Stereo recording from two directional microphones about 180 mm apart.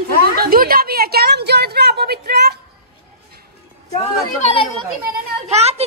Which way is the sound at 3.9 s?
35° left (ahead or behind).